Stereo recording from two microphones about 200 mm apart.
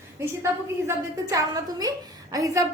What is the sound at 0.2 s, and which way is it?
A woman's voice, 15° right (ahead or behind).